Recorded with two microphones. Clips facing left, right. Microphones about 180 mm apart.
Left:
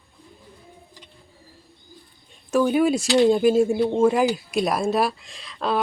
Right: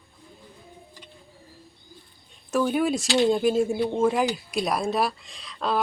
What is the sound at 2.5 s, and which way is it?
Speech, centre (ahead or behind).